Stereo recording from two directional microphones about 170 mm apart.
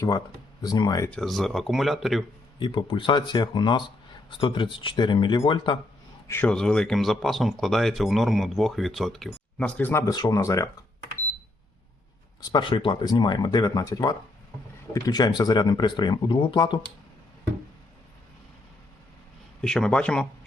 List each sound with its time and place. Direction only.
0.6 s speech: 25° left (ahead or behind)
1.1 s speech: centre (ahead or behind)
2.6 s speech: 30° left (ahead or behind)
6.2 s speech: 10° left (ahead or behind)
10.1 s speech: 20° left (ahead or behind)
12.4 s speech: 25° left (ahead or behind)
19.6 s speech: 5° left (ahead or behind)